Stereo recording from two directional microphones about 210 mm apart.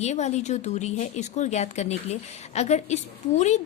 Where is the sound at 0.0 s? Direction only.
30° left (ahead or behind).